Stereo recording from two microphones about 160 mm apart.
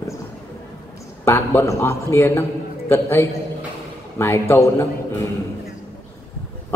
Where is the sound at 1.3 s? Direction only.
15° left (ahead or behind).